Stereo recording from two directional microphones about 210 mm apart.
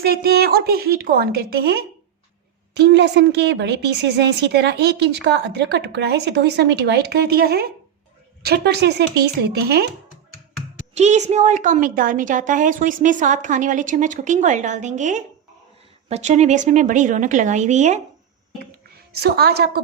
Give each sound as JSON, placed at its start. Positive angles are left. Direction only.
{"t": 0.0, "sound": "a woman's voice", "side_deg": -45}
{"t": 10.9, "sound": "a woman's voice", "side_deg": -35}
{"t": 19.2, "sound": "a woman's voice", "side_deg": -50}